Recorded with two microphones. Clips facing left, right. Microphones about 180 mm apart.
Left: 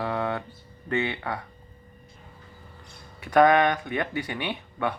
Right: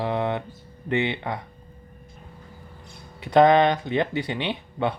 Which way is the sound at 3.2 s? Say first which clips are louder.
Right 3 dB; 25° right (ahead or behind).